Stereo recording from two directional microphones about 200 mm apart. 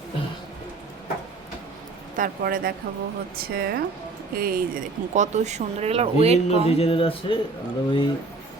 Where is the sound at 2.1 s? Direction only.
45° right (ahead or behind).